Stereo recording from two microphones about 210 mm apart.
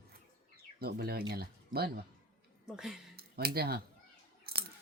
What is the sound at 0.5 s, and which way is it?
Bird, 50° right (ahead or behind).